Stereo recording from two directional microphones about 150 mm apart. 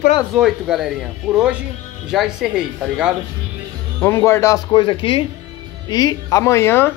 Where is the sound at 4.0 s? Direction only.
15° left (ahead or behind).